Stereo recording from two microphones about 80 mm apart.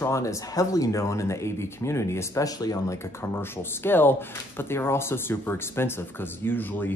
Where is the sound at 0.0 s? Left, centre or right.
Left.